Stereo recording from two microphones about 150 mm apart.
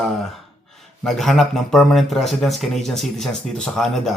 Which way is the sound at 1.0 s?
Centre (ahead or behind).